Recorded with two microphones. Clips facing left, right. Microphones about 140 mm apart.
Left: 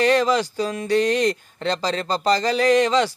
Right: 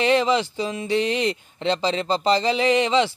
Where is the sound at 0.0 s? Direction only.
20° right (ahead or behind).